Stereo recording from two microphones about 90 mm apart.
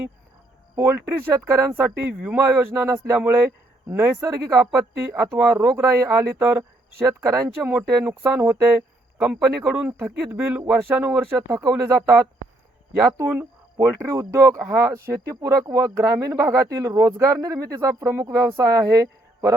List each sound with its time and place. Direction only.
0.8 s speech: 25° right (ahead or behind)
7.7 s speech: 20° right (ahead or behind)
11.2 s speech: 25° right (ahead or behind)